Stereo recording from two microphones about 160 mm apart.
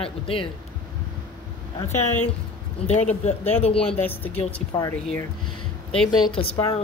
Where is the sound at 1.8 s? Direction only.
45° left (ahead or behind).